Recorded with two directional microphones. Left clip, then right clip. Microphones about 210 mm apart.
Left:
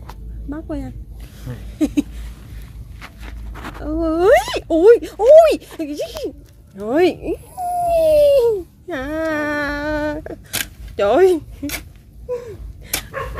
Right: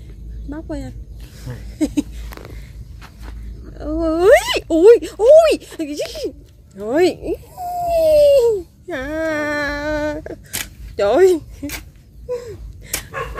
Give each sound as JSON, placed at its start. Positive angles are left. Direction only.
{"t": 0.5, "sound": "speech", "side_deg": 0}
{"t": 3.8, "sound": "speech", "side_deg": 0}
{"t": 12.3, "sound": "a sound", "side_deg": 0}